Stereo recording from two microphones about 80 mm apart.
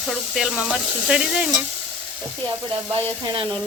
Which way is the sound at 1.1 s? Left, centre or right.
Centre.